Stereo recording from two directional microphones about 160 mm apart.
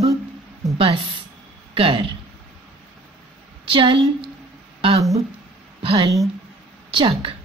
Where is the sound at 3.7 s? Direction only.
35° right (ahead or behind).